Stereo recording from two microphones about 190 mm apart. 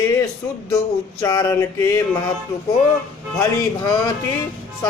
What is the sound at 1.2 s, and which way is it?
Speech, 20° left (ahead or behind).